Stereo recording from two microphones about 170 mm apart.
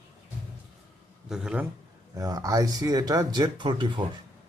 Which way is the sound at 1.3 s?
5° right (ahead or behind).